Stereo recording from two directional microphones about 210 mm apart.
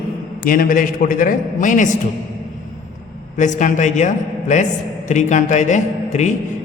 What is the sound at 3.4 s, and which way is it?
A man's voice, 35° left (ahead or behind).